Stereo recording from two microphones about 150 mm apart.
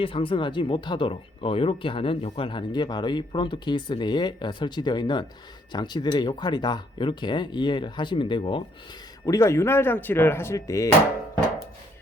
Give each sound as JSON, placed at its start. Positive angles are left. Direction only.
{"t": 0.0, "sound": "speech", "side_deg": 35}
{"t": 9.2, "sound": "speech", "side_deg": 20}